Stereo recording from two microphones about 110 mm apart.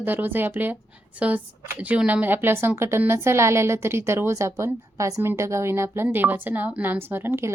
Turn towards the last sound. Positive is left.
turn(degrees=-25)  # may be behind; listen again after turning